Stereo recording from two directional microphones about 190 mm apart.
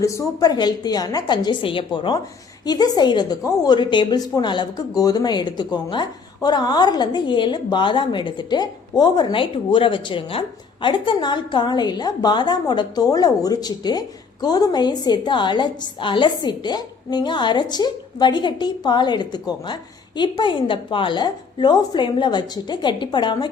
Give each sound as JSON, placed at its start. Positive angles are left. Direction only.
{"t": 0.0, "sound": "a woman's voice", "side_deg": 15}